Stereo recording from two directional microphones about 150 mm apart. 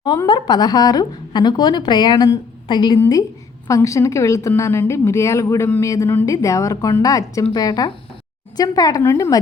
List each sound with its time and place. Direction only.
0.3 s speech: 30° left (ahead or behind)